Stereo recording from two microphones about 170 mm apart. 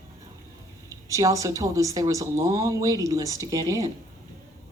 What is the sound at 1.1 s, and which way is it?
A woman's voice, 20° right (ahead or behind).